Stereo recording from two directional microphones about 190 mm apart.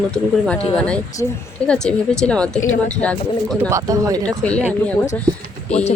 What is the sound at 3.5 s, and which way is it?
Speech, 15° right (ahead or behind).